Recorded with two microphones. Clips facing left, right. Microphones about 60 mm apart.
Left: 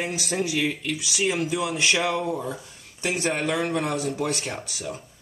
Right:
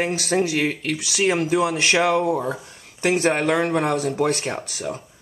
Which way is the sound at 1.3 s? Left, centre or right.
Right.